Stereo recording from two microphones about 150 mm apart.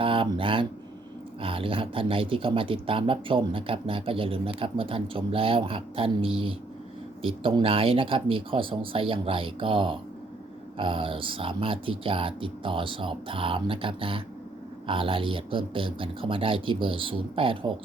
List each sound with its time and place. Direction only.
0.0 s speech: 35° right (ahead or behind)